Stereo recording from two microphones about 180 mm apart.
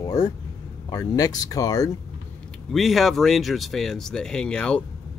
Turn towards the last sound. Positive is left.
turn(degrees=5)  # may be behind; listen again after turning